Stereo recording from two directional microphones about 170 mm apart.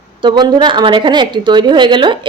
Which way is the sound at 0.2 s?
25° right (ahead or behind).